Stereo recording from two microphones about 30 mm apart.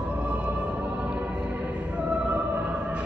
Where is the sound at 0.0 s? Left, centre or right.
Right.